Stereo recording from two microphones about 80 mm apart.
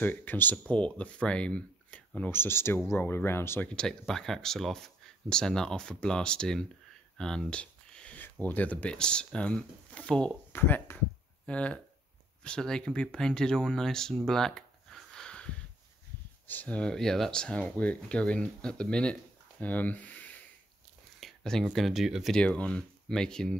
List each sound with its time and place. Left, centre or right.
0.0 s speech: left
3.6 s speech: centre
7.2 s a sound: centre
8.2 s speech: left
10.5 s speech: left
11.4 s speech: centre
21.2 s a sound: centre
21.7 s speech: centre
22.3 s speech: centre